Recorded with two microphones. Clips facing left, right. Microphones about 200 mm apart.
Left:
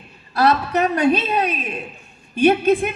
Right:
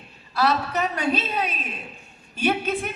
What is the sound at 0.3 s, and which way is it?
A man's voice, 45° left (ahead or behind).